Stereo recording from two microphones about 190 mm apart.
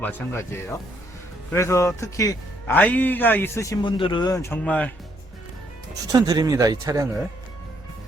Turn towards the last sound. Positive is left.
turn(degrees=-20)  # may be behind; listen again after turning